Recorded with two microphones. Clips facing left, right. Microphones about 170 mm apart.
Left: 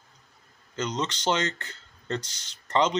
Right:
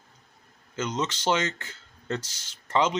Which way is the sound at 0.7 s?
5° right (ahead or behind).